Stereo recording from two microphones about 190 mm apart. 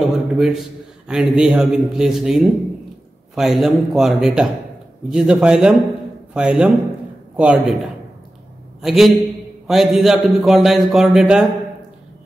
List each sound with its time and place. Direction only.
0.0 s a man's voice: centre (ahead or behind)